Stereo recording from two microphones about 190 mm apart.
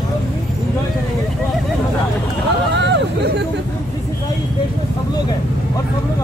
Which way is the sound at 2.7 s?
65° right (ahead or behind).